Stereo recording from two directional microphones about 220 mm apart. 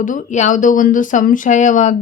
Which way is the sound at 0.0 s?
35° left (ahead or behind).